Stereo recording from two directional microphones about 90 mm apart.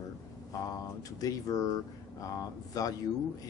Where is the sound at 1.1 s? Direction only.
40° left (ahead or behind).